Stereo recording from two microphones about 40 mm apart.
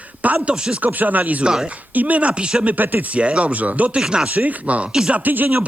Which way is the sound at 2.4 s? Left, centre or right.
Right.